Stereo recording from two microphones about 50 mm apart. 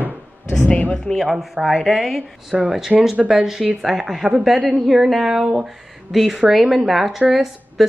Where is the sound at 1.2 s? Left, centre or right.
Centre.